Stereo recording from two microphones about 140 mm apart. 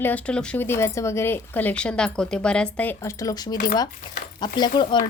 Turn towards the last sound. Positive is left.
turn(degrees=35)  # may be behind; listen again after turning